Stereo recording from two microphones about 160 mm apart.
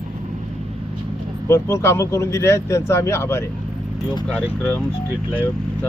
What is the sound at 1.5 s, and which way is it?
Speech, 15° left (ahead or behind).